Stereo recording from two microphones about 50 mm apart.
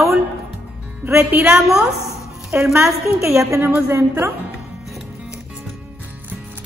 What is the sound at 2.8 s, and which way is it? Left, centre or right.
Speech, right.